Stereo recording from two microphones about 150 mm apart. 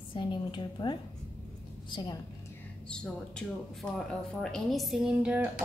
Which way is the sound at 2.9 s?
5° left (ahead or behind).